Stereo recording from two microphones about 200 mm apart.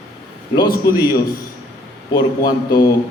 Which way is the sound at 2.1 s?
20° left (ahead or behind).